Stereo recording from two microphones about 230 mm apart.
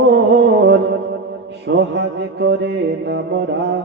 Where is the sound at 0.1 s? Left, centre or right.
Right.